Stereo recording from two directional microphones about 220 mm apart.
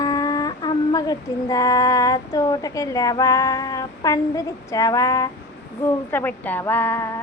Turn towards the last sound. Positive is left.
turn(degrees=10)  # may be behind; listen again after turning